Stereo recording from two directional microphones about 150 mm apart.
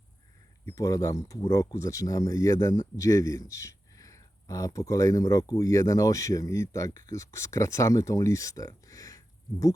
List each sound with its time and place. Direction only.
0.6 s speech: 15° left (ahead or behind)